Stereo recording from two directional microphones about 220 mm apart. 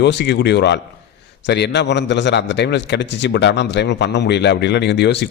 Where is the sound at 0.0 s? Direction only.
50° left (ahead or behind).